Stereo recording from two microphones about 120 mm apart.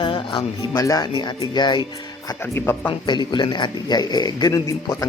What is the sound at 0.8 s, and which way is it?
A man's voice, 30° left (ahead or behind).